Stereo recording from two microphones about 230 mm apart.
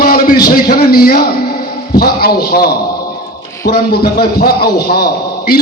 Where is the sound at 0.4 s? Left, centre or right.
Left.